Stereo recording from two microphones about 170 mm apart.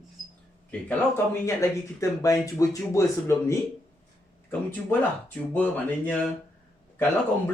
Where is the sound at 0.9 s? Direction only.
15° left (ahead or behind).